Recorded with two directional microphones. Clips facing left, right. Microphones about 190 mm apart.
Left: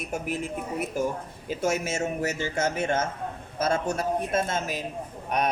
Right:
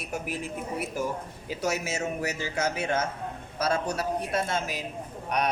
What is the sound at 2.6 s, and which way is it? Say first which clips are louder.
Speech: left 2 dB; 50° left (ahead or behind).